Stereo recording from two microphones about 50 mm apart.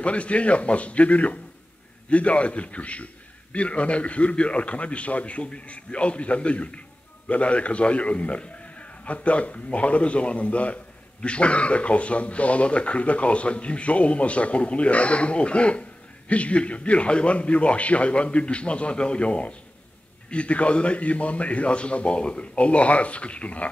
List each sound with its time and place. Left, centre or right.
0.0 s a man's voice: left